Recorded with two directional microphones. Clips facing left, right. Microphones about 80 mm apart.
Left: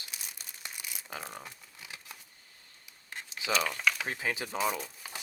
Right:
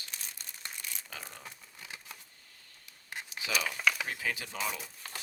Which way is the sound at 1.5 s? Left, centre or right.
Centre.